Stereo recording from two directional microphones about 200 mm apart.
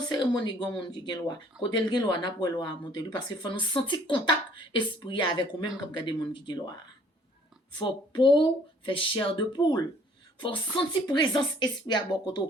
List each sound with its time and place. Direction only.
0.1 s speech: 20° left (ahead or behind)
7.8 s speech: 25° left (ahead or behind)
11.0 s speech: 20° left (ahead or behind)